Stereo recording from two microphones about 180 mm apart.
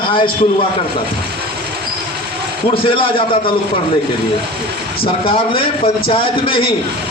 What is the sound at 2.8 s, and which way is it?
Speech, 30° left (ahead or behind).